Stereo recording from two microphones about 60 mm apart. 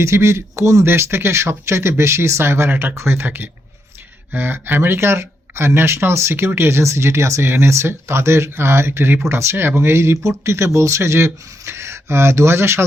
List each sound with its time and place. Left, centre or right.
0.0 s speech: right
0.9 s speech: right